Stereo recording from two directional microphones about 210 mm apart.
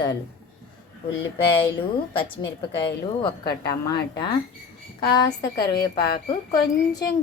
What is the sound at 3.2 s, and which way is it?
A woman's voice, 20° left (ahead or behind).